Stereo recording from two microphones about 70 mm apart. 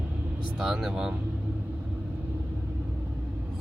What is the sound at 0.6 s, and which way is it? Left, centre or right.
Speech, centre.